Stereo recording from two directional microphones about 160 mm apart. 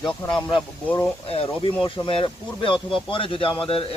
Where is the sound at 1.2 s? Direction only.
35° left (ahead or behind).